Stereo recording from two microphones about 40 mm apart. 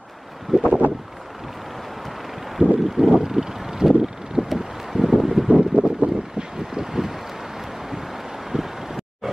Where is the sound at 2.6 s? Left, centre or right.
Right.